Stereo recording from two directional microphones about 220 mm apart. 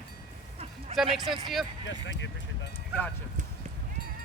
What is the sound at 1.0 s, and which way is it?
Speech, 25° right (ahead or behind).